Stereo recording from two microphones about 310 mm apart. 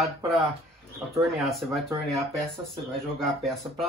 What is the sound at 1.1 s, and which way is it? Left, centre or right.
Speech, centre.